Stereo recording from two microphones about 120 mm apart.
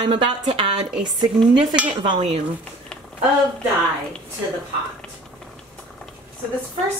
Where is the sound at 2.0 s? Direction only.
50° right (ahead or behind).